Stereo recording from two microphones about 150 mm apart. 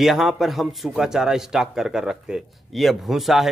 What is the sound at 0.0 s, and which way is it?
A man's voice, centre (ahead or behind).